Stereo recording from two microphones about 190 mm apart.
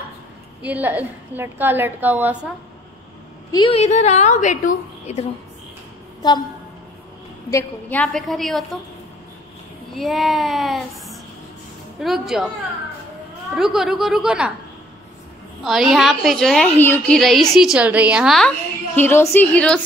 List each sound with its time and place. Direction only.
0.6 s a woman's voice: 10° right (ahead or behind)
3.5 s a woman's voice: 30° left (ahead or behind)
7.5 s a woman's voice: 10° left (ahead or behind)
9.9 s a woman's voice: centre (ahead or behind)
13.6 s a woman's voice: 5° right (ahead or behind)
15.6 s a woman's voice: centre (ahead or behind)
18.9 s a woman's voice: 10° left (ahead or behind)